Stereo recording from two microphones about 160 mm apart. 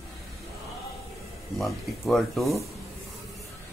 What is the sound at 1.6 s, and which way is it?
Speech, centre (ahead or behind).